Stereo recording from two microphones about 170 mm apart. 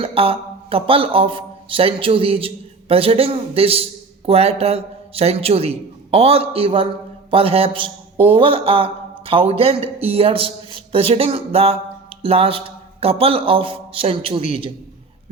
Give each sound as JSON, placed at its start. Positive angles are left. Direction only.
{"t": 0.0, "sound": "speech", "side_deg": -35}